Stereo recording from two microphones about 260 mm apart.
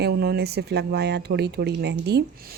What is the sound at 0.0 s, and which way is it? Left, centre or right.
Speech, right.